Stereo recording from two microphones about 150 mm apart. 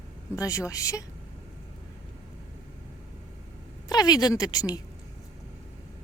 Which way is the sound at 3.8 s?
25° left (ahead or behind).